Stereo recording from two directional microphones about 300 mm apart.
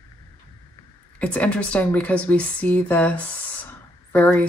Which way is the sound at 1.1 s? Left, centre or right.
Centre.